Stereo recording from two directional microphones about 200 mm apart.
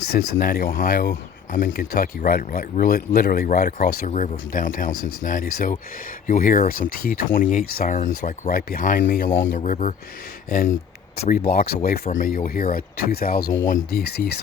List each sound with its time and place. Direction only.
0.1 s speech: 45° left (ahead or behind)
11.2 s speech: 50° left (ahead or behind)